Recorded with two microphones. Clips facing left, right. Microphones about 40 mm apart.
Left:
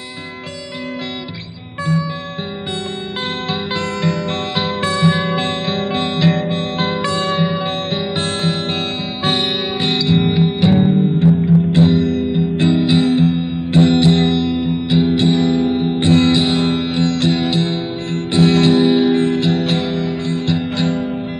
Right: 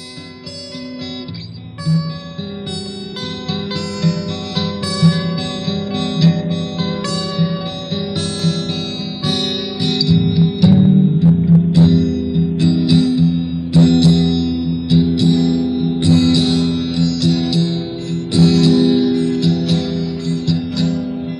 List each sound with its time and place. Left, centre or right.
4.0 s music: left